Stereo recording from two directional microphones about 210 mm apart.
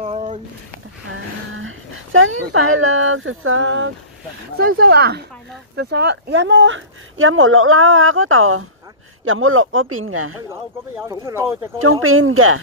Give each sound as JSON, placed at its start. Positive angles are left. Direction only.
{"t": 0.0, "sound": "a sound", "side_deg": -30}
{"t": 1.1, "sound": "a sound", "side_deg": -70}
{"t": 2.8, "sound": "speech", "side_deg": -70}
{"t": 4.6, "sound": "speech", "side_deg": -50}
{"t": 10.5, "sound": "speech", "side_deg": -15}
{"t": 11.8, "sound": "speech", "side_deg": -80}